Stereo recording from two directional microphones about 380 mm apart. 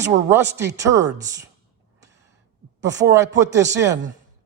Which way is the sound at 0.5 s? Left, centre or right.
Centre.